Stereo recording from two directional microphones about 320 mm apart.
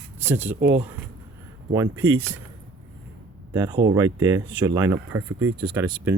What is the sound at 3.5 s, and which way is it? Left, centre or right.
Speech, centre.